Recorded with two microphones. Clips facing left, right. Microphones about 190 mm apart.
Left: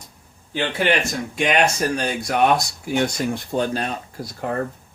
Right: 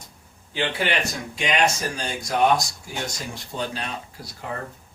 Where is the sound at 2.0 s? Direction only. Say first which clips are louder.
Left 1 dB; 65° left (ahead or behind).